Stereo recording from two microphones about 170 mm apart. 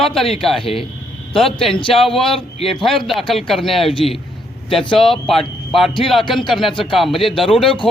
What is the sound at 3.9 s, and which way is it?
Speech, 30° left (ahead or behind).